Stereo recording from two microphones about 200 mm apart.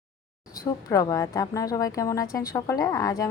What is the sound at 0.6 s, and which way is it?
Speech, 15° left (ahead or behind).